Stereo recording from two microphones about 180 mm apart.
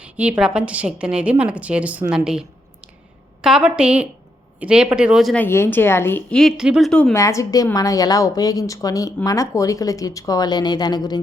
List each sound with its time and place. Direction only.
0.0 s a woman's voice: 5° right (ahead or behind)
5.4 s a woman's voice: 15° left (ahead or behind)